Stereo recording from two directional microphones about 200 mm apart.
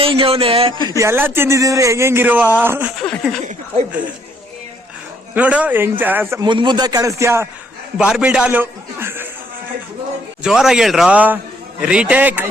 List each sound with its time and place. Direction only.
0.0 s speech: 25° right (ahead or behind); by 3.4 s 5° left (ahead or behind)
5.3 s speech: 5° right (ahead or behind)
6.4 s a man's voice: 25° right (ahead or behind)
10.4 s a man's voice: 5° right (ahead or behind)